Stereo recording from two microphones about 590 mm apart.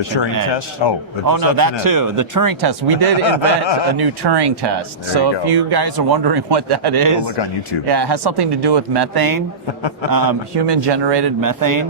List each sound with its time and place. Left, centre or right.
0.4 s speech: left
1.3 s speech: right
3.2 s speech: left
3.9 s speech: right
7.3 s speech: left
7.9 s speech: right